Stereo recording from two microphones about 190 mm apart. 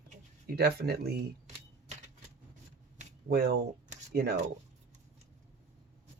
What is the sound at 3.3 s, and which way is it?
Speech, 60° right (ahead or behind).